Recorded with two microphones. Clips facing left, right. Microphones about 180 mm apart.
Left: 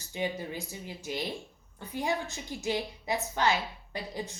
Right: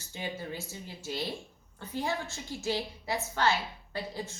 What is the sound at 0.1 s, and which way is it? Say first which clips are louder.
A woman's voice: left 4 dB; 15° left (ahead or behind).